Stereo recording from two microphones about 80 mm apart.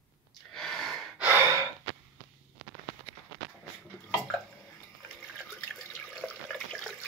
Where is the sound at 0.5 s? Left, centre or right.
Centre.